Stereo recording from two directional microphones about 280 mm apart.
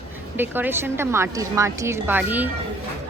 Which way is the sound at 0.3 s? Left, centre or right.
Centre.